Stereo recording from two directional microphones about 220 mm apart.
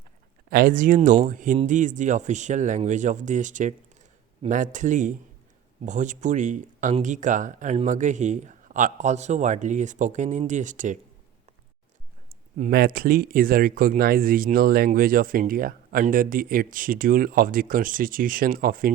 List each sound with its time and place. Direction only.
0.5 s speech: 35° right (ahead or behind)
12.5 s speech: 40° right (ahead or behind)